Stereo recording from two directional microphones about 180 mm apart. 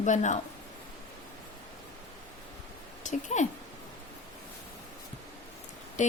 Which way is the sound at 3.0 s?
40° left (ahead or behind).